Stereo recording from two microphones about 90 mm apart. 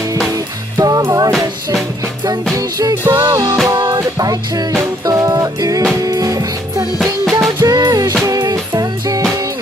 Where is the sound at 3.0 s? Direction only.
25° right (ahead or behind).